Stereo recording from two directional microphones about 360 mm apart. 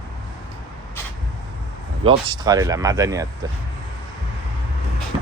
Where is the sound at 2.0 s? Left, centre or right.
Centre.